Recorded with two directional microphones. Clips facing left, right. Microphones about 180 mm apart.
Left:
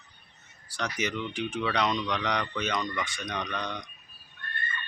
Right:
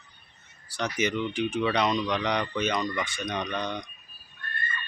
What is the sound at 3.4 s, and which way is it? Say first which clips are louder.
Speech: right 3 dB; 25° right (ahead or behind).